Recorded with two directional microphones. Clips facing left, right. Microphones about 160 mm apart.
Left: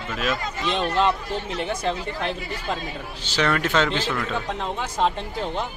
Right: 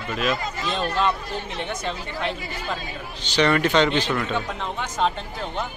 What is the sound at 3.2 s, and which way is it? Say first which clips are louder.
Speech: right 3 dB; 5° left (ahead or behind).